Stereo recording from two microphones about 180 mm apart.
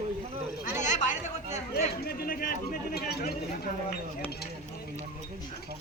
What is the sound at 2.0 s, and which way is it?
Speech, 60° left (ahead or behind).